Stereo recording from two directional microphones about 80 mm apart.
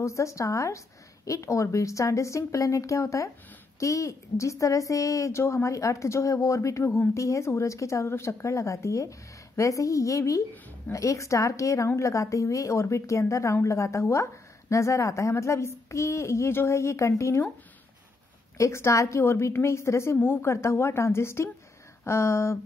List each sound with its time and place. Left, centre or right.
0.0 s a woman's voice: left
18.6 s speech: left